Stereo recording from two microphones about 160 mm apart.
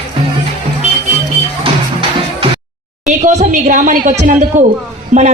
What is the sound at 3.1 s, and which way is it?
A woman's voice, 50° right (ahead or behind).